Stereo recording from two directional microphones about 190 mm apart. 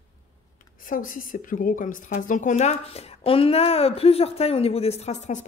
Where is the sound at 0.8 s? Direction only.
45° left (ahead or behind).